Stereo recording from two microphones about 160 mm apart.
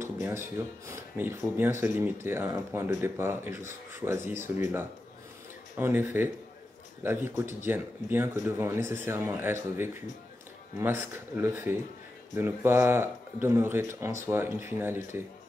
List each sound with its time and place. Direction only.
0.0 s speech: 15° right (ahead or behind)